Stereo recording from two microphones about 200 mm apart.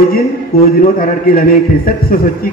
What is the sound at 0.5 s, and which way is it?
A man's voice, 50° left (ahead or behind).